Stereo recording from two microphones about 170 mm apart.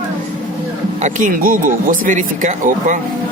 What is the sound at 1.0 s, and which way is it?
Speech, 50° right (ahead or behind).